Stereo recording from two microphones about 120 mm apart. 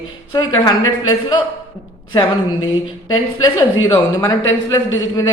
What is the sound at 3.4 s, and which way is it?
Speech, 30° left (ahead or behind).